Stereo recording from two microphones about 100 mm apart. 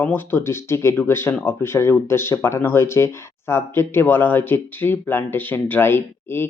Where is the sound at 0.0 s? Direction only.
20° left (ahead or behind).